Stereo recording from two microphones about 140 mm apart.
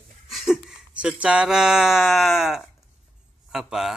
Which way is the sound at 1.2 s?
5° right (ahead or behind).